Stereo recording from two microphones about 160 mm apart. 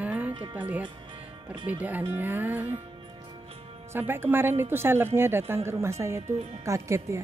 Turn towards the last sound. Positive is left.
turn(degrees=-20)  # may be behind; listen again after turning